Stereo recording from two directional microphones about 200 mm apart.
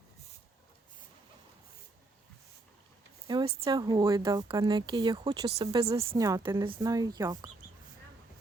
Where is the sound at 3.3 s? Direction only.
20° right (ahead or behind).